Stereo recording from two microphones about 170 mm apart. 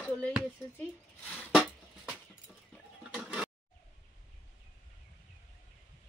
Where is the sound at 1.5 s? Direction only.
Centre (ahead or behind).